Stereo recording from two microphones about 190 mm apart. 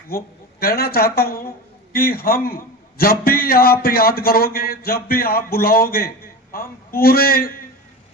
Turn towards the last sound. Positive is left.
turn(degrees=50)  # may be behind; listen again after turning